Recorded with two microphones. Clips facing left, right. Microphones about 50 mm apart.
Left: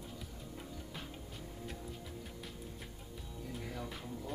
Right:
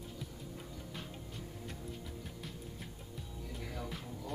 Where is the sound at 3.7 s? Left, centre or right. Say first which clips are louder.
Right 1 dB; centre.